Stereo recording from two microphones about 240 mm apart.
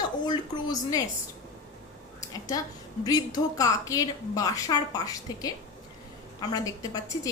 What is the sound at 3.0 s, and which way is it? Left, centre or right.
A woman's voice, centre.